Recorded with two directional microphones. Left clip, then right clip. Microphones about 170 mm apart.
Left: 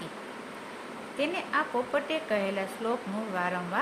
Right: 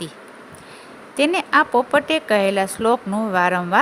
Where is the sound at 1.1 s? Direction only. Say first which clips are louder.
Right 13 dB; 75° right (ahead or behind).